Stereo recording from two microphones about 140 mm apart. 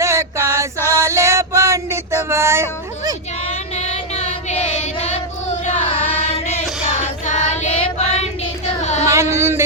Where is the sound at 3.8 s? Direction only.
50° left (ahead or behind).